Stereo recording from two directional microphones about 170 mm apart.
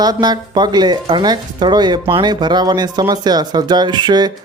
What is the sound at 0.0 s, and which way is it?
Speech, 25° right (ahead or behind).